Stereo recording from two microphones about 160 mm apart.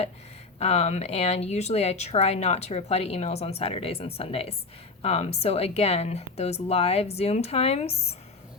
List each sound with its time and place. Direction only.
0.6 s speech: 40° left (ahead or behind)